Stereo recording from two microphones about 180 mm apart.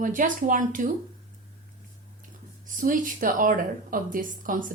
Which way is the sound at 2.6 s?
45° right (ahead or behind).